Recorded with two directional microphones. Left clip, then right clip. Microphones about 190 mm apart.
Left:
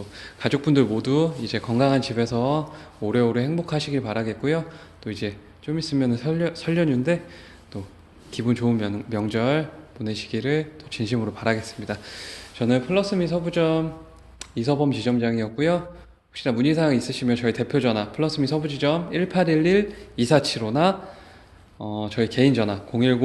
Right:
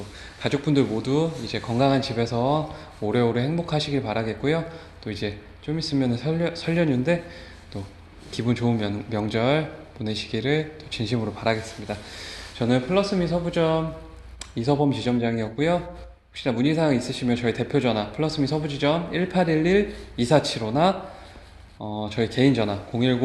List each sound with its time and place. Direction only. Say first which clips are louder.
0.2 s a man's voice: left 2 dB; 45° left (ahead or behind)
8.3 s a man's voice: left 1 dB; 35° left (ahead or behind)